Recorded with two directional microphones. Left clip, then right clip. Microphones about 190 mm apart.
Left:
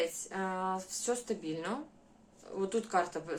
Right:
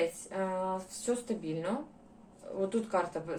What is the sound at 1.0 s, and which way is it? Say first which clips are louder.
Speech: right 1 dB; 30° left (ahead or behind).